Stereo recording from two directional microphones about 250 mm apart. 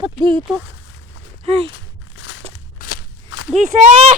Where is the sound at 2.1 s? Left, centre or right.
Left.